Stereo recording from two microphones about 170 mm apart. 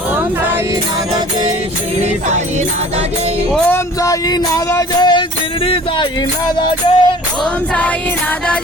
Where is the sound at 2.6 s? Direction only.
35° right (ahead or behind).